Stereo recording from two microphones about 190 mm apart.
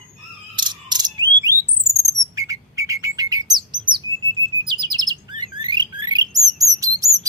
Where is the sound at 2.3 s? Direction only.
15° right (ahead or behind).